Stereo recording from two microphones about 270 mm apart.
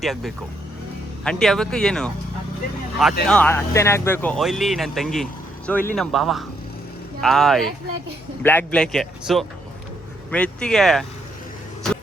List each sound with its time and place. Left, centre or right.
0.0 s speech: centre